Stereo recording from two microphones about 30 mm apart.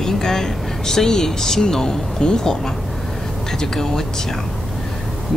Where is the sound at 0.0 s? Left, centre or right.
Centre.